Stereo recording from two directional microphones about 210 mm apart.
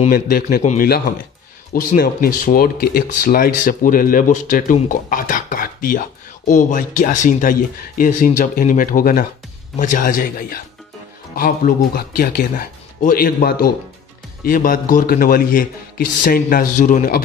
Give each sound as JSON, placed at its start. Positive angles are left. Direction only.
{"t": 0.1, "sound": "speech", "side_deg": 45}